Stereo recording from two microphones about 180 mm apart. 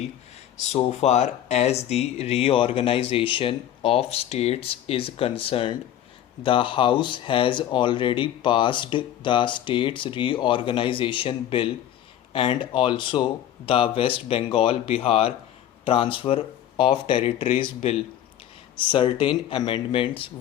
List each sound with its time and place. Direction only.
0.7 s speech: 35° left (ahead or behind)